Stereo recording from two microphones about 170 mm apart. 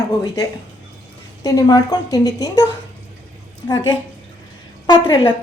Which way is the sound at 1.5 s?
20° left (ahead or behind).